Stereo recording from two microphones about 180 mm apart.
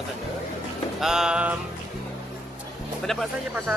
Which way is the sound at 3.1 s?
Centre (ahead or behind).